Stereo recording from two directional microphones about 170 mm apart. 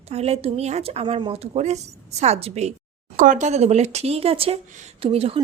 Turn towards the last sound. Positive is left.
turn(degrees=-35)  # may be behind; listen again after turning